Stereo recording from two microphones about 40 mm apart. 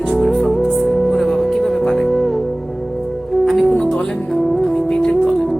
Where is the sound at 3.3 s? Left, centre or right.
Centre.